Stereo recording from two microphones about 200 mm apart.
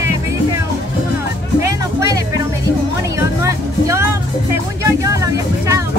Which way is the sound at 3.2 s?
15° right (ahead or behind).